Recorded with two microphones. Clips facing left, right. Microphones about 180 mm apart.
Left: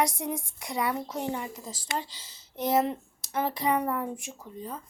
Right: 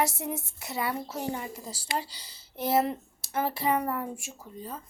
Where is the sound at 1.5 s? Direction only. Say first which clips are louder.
Right 1 dB; 10° right (ahead or behind).